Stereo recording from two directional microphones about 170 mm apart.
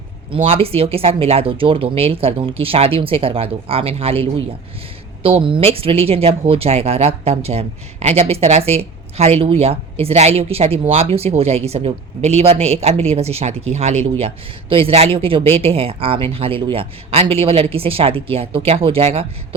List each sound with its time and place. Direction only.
0.3 s speech: 30° right (ahead or behind)